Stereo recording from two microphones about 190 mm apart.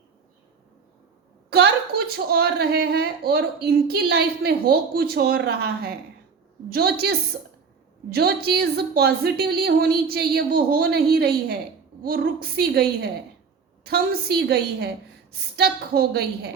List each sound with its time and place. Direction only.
1.5 s a woman's voice: 60° right (ahead or behind)